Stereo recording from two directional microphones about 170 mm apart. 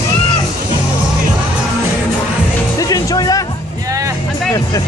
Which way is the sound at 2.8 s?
20° left (ahead or behind).